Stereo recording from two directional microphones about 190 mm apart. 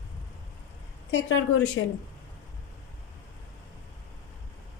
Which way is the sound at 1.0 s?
80° left.